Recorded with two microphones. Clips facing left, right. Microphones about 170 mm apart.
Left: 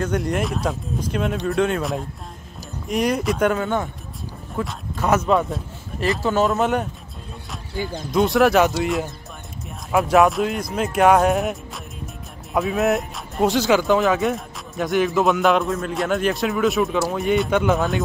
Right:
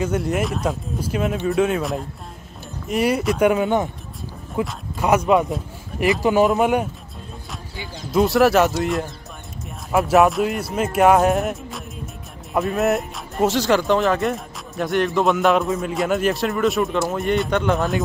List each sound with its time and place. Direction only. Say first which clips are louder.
0.0 s speech: right 1 dB; 5° right (ahead or behind)
7.7 s speech: left 11 dB; 45° left (ahead or behind)
8.1 s speech: right 1 dB; centre (ahead or behind)